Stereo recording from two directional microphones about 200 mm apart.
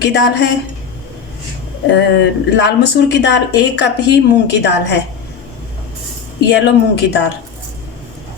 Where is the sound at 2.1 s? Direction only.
60° left (ahead or behind).